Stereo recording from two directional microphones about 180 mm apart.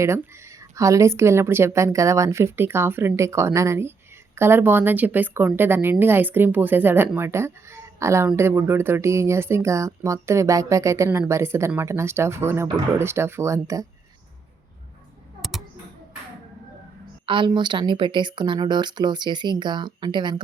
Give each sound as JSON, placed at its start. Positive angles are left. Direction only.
{"t": 0.0, "sound": "speech", "side_deg": -15}
{"t": 15.4, "sound": "a sound", "side_deg": 0}
{"t": 17.2, "sound": "speech", "side_deg": -25}